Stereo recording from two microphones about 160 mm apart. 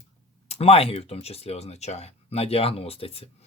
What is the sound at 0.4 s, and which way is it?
Speech, 40° left (ahead or behind).